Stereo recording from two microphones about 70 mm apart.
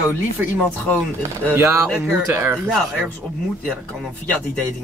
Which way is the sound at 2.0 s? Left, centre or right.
Right.